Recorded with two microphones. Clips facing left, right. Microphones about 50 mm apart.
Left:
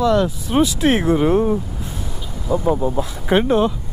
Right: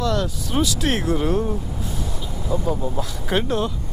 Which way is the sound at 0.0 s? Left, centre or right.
Centre.